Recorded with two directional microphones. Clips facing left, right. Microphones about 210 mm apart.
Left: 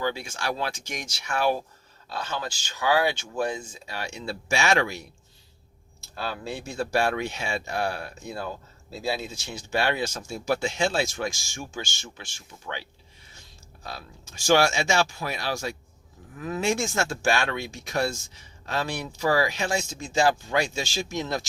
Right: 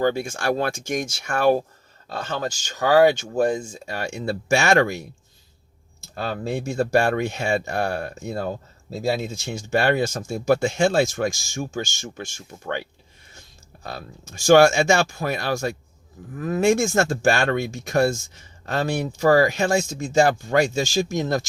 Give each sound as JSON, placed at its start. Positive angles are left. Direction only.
{"t": 0.0, "sound": "speech", "side_deg": -50}
{"t": 6.1, "sound": "speech", "side_deg": -50}
{"t": 13.8, "sound": "speech", "side_deg": -50}